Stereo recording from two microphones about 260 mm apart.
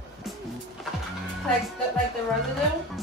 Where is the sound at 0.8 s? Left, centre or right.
Centre.